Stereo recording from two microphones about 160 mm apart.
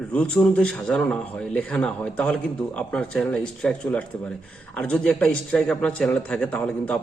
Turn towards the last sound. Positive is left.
turn(degrees=5)  # may be behind; listen again after turning